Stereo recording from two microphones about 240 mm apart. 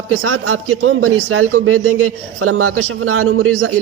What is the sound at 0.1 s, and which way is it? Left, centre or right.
A man's voice, right.